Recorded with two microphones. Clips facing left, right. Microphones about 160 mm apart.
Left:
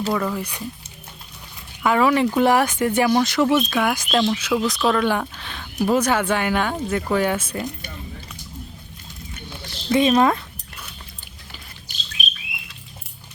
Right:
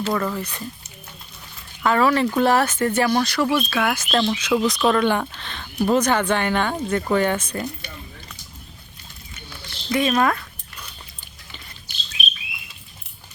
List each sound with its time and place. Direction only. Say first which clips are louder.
0.1 s speech: even; 5° left (ahead or behind)
1.8 s speech: left 1 dB; 15° left (ahead or behind)
9.5 s a sound: left 4 dB; 20° left (ahead or behind)
12.2 s bird: right 1 dB; 45° left (ahead or behind)